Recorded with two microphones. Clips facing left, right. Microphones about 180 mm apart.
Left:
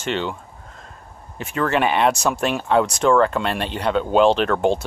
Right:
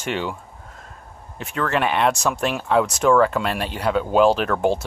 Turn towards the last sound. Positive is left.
turn(degrees=-5)  # may be behind; listen again after turning